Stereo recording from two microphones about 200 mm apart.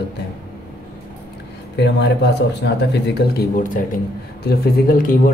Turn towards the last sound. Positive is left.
turn(degrees=45)  # may be behind; listen again after turning